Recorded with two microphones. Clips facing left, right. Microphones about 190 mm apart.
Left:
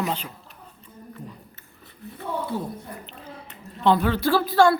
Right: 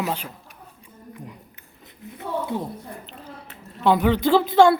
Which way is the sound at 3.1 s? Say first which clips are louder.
Right 1 dB; centre (ahead or behind).